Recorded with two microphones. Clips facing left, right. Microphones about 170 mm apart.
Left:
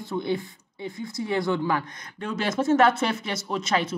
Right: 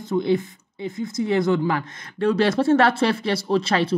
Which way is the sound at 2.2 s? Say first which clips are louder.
Right 6 dB; 35° right (ahead or behind).